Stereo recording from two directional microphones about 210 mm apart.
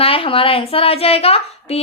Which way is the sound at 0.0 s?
25° left (ahead or behind).